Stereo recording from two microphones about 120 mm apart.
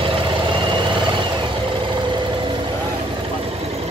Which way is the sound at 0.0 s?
45° right (ahead or behind).